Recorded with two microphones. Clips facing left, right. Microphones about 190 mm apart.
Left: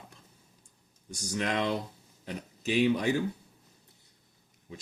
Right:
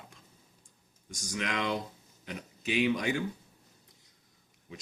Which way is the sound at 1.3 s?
40° left (ahead or behind).